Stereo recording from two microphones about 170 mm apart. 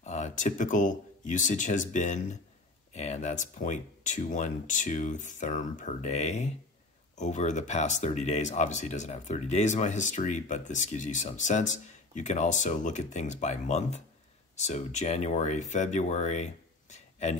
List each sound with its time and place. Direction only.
0.0 s speech: 45° left (ahead or behind)